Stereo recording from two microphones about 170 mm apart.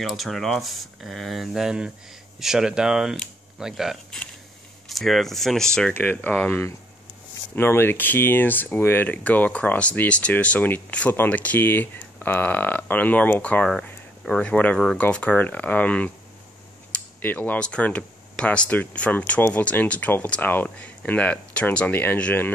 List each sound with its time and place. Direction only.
0.0 s speech: centre (ahead or behind)